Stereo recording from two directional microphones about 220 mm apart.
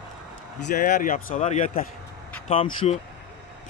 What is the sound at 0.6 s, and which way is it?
Speech, 45° left (ahead or behind).